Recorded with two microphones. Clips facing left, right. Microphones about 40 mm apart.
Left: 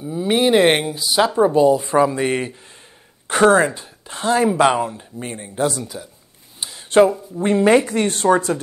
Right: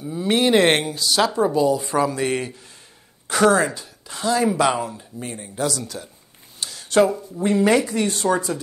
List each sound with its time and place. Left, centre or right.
0.0 s speech: centre
1.5 s speech: left
7.9 s speech: left